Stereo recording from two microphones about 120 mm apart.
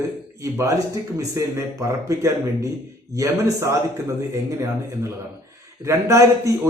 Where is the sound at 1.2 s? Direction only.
30° right (ahead or behind).